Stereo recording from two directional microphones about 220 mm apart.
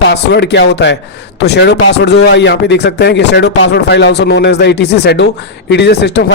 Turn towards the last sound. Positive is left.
turn(degrees=50)  # may be behind; listen again after turning